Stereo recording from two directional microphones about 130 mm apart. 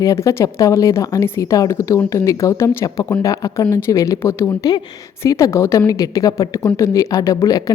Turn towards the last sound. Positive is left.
turn(degrees=30)  # may be behind; listen again after turning